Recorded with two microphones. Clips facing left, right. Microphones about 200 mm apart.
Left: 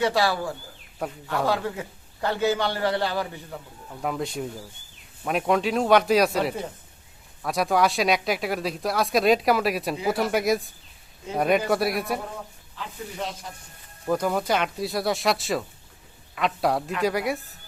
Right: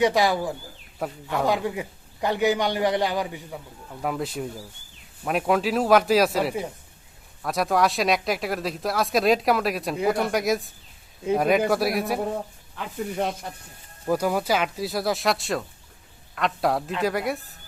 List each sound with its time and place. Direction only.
0.0 s a man's voice: 15° right (ahead or behind)
4.0 s speech: 5° right (ahead or behind)
12.7 s speech: 55° right (ahead or behind)
14.1 s speech: 5° right (ahead or behind)